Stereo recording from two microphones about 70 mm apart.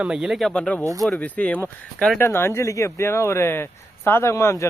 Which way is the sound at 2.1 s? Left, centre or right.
Left.